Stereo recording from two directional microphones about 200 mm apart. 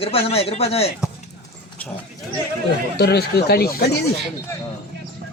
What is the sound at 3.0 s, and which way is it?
Speech, 55° left (ahead or behind).